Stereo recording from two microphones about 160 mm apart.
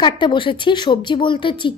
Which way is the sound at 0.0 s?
30° left (ahead or behind).